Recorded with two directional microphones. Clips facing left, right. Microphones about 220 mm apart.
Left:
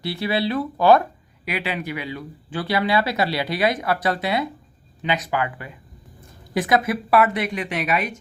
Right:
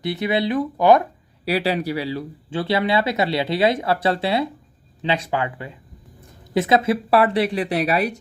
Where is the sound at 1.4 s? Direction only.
35° right (ahead or behind).